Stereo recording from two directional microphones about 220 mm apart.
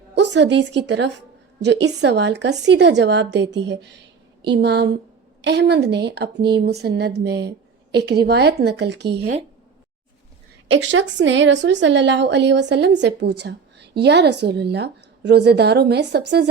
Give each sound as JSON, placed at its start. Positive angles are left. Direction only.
{"t": 0.1, "sound": "speech", "side_deg": -55}
{"t": 10.7, "sound": "speech", "side_deg": -55}